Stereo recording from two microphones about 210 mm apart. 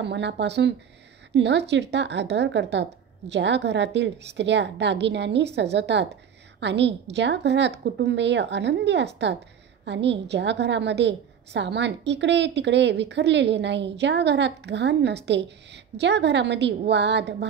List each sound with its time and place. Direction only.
0.0 s a woman's voice: 55° right (ahead or behind)